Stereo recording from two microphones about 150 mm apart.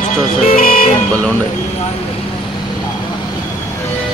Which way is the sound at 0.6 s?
70° left (ahead or behind).